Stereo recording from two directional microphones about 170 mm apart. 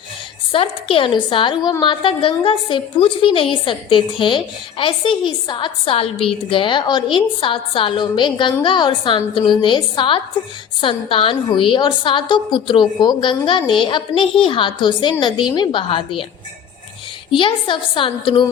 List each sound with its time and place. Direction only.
0.5 s a woman's voice: 30° left (ahead or behind)
17.3 s a woman's voice: 30° left (ahead or behind)